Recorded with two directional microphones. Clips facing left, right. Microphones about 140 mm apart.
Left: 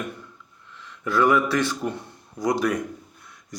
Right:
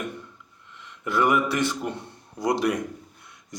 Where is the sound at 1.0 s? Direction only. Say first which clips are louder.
Left 2 dB; 20° right (ahead or behind).